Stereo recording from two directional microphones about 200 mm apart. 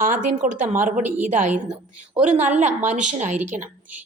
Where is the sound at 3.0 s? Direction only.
35° right (ahead or behind).